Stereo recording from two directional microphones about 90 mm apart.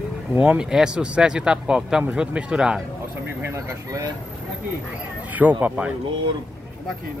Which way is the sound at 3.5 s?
40° right (ahead or behind).